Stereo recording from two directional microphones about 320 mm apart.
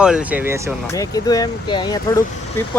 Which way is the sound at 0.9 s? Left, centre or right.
Centre.